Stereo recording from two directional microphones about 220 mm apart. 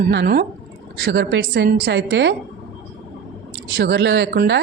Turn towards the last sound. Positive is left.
turn(degrees=-50)  # may be behind; listen again after turning